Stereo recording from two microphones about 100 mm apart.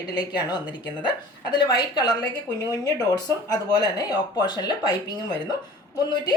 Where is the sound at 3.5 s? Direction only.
40° left (ahead or behind).